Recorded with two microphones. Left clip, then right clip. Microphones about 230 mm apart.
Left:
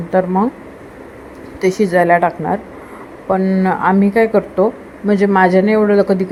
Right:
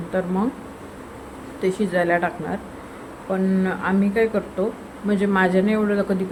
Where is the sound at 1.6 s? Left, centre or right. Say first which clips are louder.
Left 8 dB; left.